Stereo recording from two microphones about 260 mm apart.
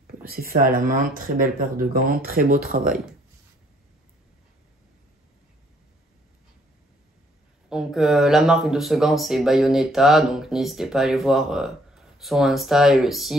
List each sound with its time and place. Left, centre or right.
0.0 s speech: right
7.7 s speech: centre